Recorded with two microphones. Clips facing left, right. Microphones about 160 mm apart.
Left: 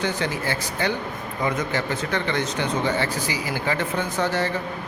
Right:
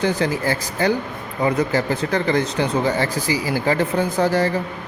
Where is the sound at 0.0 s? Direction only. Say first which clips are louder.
Right 5 dB; 35° right (ahead or behind).